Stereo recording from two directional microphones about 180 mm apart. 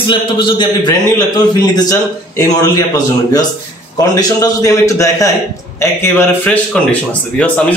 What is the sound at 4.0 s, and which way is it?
A man's voice, 20° left (ahead or behind).